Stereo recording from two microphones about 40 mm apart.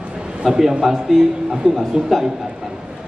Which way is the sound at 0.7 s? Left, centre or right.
Centre.